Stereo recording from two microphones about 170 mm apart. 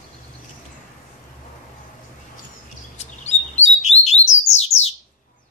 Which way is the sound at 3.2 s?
40° left (ahead or behind).